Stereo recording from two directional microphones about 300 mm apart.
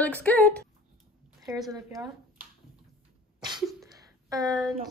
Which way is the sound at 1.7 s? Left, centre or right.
Centre.